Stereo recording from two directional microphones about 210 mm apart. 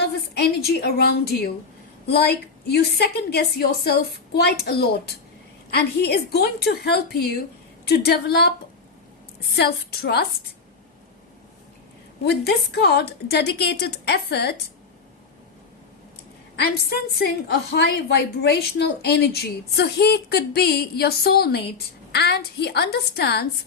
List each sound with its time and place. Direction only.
0.0 s a woman's voice: 50° left (ahead or behind)
2.6 s a woman's voice: 50° left (ahead or behind)
9.6 s a woman's voice: 50° left (ahead or behind)
12.7 s a woman's voice: 50° left (ahead or behind)
16.6 s a woman's voice: 50° left (ahead or behind)